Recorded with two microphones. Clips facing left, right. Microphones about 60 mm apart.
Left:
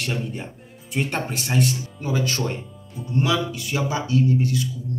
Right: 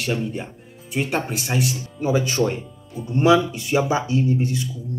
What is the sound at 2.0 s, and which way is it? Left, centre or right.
Speech, centre.